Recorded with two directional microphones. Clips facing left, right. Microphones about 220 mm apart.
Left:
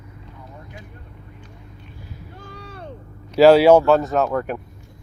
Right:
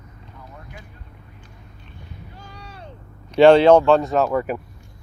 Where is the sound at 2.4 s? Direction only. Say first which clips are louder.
Left 5 dB; 55° left (ahead or behind).